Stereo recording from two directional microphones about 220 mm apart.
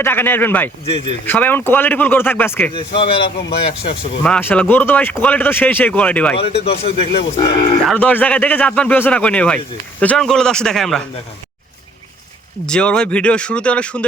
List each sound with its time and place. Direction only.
0.0 s speech: 10° left (ahead or behind)
0.9 s speech: 25° left (ahead or behind)
1.2 s speech: 10° left (ahead or behind)
2.7 s speech: 25° left (ahead or behind)
4.2 s speech: 5° left (ahead or behind)
6.4 s speech: 25° left (ahead or behind)
7.9 s speech: 5° left (ahead or behind)
12.6 s speech: 5° left (ahead or behind)